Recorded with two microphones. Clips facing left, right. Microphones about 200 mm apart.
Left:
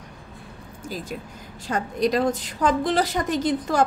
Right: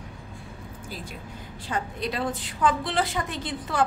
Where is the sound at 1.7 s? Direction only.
40° left (ahead or behind).